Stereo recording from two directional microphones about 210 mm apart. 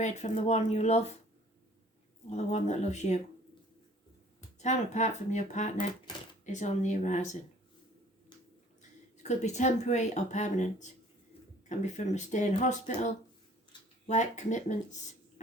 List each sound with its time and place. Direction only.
0.0 s speech: 35° left (ahead or behind)
2.3 s speech: 35° left (ahead or behind)
4.6 s speech: 35° left (ahead or behind)
9.1 s speech: 35° left (ahead or behind)
13.7 s a sound: 20° left (ahead or behind)
14.1 s speech: 35° left (ahead or behind)